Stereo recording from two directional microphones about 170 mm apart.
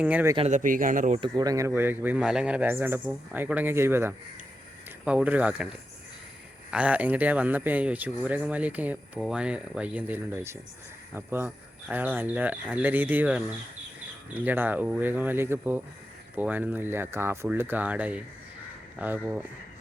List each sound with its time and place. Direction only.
0.0 s speech: 10° right (ahead or behind)
0.3 s speech: 45° right (ahead or behind)
1.4 s speech: 20° right (ahead or behind)